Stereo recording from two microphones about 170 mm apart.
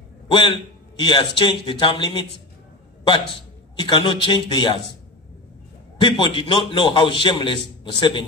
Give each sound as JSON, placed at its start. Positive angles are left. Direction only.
{"t": 0.3, "sound": "a man's voice", "side_deg": 30}
{"t": 3.7, "sound": "a man's voice", "side_deg": 25}
{"t": 5.9, "sound": "a man's voice", "side_deg": 30}